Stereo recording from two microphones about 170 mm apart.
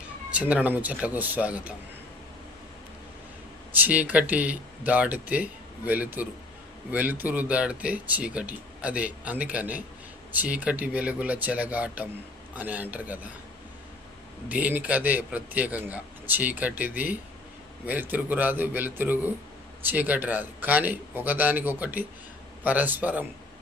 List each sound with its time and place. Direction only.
0.3 s speech: 10° right (ahead or behind)
3.7 s speech: 10° right (ahead or behind)
14.5 s speech: 10° right (ahead or behind)